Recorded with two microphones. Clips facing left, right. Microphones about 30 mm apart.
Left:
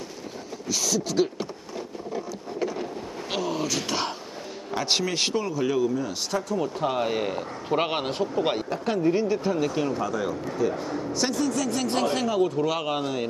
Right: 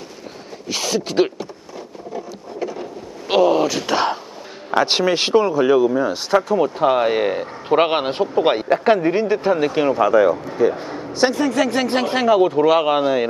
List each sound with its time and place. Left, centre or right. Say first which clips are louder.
0.7 s speech: right 5 dB; right
2.1 s boat: right 3 dB; centre
3.3 s speech: right 13 dB; right
4.8 s speech: right 3 dB; right
8.6 s speech: right 9 dB; right
9.1 s speech: right 7 dB; right
10.5 s speech: right 7 dB; right
12.6 s speech: right 11 dB; right